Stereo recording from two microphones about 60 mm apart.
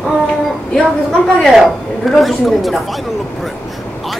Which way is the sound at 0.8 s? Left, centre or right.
Centre.